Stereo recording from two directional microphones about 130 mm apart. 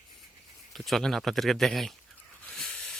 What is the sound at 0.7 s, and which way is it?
Speech, centre (ahead or behind).